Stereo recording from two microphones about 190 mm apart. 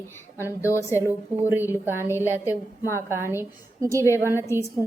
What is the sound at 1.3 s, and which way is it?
Speech, 10° right (ahead or behind).